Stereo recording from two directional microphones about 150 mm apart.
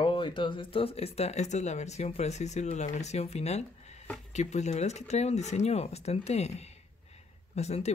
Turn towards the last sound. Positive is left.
turn(degrees=45)  # may be behind; listen again after turning